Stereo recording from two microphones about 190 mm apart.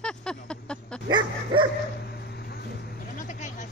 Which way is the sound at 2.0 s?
55° left (ahead or behind).